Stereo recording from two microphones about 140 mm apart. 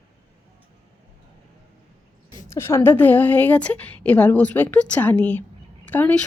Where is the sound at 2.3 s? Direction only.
20° left (ahead or behind).